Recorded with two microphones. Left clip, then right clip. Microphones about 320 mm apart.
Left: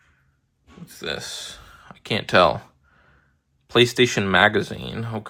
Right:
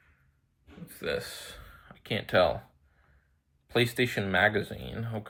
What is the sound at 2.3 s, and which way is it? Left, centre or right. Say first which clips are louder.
Speech: left 8 dB; left.